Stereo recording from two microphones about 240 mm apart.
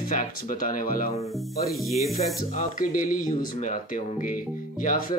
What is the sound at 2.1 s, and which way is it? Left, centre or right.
Speech, left.